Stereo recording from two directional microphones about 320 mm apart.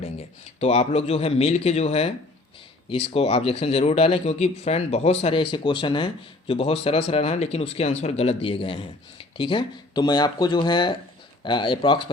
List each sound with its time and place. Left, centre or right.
0.0 s speech: centre